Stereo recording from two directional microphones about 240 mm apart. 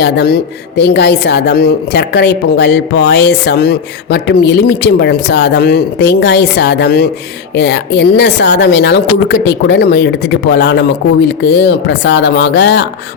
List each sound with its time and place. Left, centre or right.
0.0 s a woman's voice: left